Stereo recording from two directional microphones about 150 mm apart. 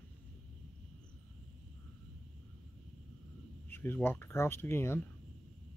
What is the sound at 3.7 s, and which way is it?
Speech, 15° left (ahead or behind).